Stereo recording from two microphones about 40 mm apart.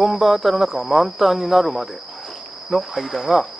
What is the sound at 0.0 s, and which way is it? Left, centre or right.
Speech, centre.